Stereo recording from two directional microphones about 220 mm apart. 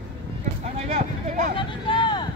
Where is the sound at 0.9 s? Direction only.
35° right (ahead or behind).